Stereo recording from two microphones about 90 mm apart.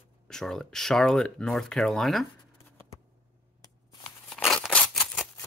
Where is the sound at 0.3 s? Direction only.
5° left (ahead or behind).